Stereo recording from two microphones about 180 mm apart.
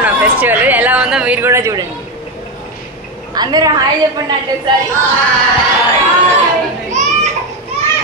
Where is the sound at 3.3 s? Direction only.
20° right (ahead or behind).